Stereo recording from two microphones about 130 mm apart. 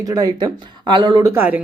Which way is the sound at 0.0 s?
30° right (ahead or behind).